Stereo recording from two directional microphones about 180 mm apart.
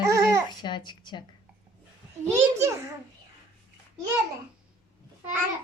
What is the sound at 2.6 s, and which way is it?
Speech, 15° right (ahead or behind).